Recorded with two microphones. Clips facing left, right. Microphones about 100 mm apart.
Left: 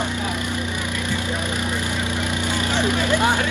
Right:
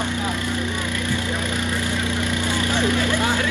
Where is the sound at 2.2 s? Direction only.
20° left (ahead or behind).